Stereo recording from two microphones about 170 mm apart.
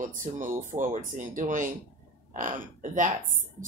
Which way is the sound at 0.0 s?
50° right (ahead or behind).